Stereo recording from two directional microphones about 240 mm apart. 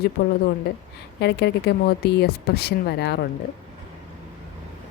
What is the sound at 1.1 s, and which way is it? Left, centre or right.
A woman's voice, left.